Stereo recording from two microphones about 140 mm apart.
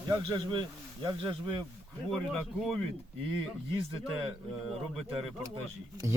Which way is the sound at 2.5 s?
Centre (ahead or behind).